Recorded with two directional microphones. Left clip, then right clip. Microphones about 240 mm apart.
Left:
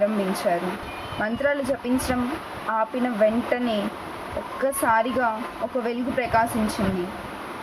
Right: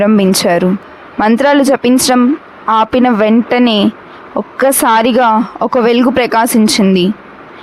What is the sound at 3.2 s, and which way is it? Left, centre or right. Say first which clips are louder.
Speech: right 11 dB; right.